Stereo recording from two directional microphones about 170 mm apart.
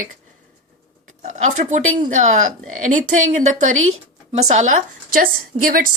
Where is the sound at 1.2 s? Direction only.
45° right (ahead or behind).